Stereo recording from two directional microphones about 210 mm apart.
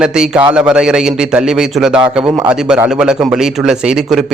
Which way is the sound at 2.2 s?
20° right (ahead or behind).